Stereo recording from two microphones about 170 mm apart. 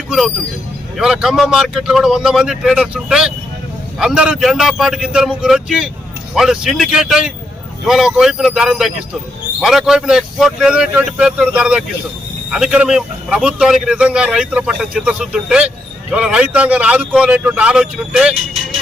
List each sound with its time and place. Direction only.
0.9 s a man's voice: 5° right (ahead or behind)